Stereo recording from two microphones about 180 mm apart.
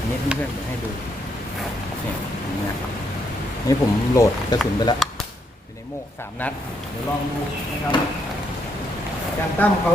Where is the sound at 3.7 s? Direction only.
20° left (ahead or behind).